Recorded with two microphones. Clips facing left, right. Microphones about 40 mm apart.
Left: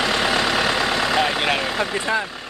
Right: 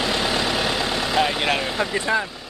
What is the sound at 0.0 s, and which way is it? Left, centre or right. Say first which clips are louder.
Vehicle: left 3 dB; left.